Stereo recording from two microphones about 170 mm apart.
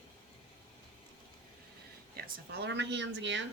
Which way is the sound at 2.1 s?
65° right (ahead or behind).